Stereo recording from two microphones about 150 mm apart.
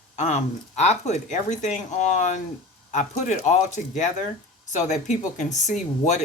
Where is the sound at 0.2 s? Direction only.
50° left (ahead or behind).